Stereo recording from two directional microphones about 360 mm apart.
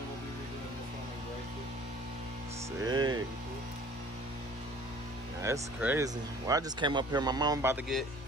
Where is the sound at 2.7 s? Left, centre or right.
Centre.